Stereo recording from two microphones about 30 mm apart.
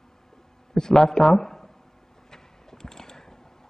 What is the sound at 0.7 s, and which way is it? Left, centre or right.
Speech, centre.